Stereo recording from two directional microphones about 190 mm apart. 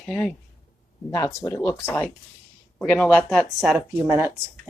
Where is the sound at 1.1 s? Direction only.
15° left (ahead or behind).